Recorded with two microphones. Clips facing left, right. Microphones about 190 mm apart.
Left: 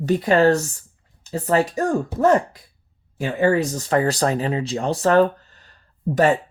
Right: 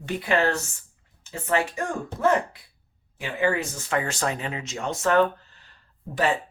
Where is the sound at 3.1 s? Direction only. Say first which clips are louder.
Left 6 dB; 40° left (ahead or behind).